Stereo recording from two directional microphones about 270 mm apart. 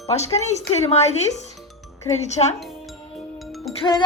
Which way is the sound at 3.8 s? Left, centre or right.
Centre.